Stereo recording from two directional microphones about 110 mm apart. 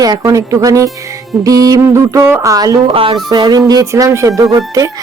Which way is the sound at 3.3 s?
35° right (ahead or behind).